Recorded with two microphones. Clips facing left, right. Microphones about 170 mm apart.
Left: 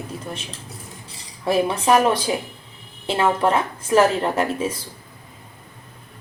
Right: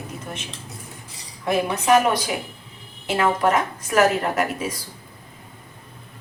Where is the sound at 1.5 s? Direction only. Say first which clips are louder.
Left 1 dB; 30° left (ahead or behind).